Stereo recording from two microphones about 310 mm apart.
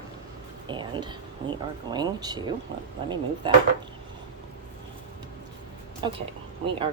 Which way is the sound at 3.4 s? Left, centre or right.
Centre.